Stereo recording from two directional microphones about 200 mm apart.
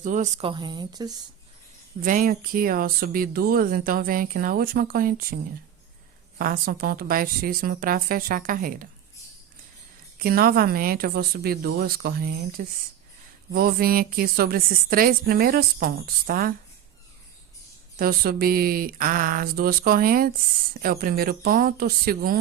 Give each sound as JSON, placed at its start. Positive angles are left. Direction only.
{"t": 0.0, "sound": "a woman's voice", "side_deg": -40}
{"t": 0.5, "sound": "a woman's voice", "side_deg": -20}
{"t": 2.0, "sound": "speech", "side_deg": -45}
{"t": 6.4, "sound": "speech", "side_deg": -45}
{"t": 10.2, "sound": "speech", "side_deg": -50}
{"t": 17.9, "sound": "speech", "side_deg": -50}